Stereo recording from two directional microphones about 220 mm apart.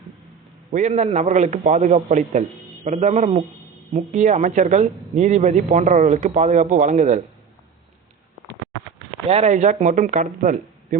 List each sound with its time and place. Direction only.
0.7 s speech: 35° right (ahead or behind)
9.3 s speech: 30° right (ahead or behind)